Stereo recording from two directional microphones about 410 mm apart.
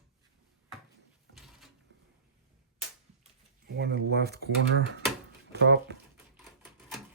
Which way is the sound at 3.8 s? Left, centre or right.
Right.